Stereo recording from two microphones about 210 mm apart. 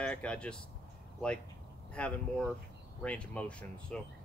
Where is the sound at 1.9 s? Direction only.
5° left (ahead or behind).